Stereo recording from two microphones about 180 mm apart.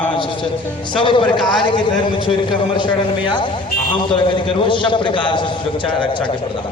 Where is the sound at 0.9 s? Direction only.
25° left (ahead or behind).